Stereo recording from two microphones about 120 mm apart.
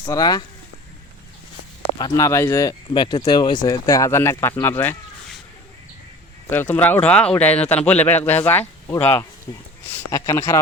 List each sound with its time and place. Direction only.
0.0 s speech: 35° left (ahead or behind)
2.1 s speech: 25° left (ahead or behind)
2.9 s speech: 40° left (ahead or behind); by 4.9 s 20° left (ahead or behind)
6.5 s speech: 15° left (ahead or behind)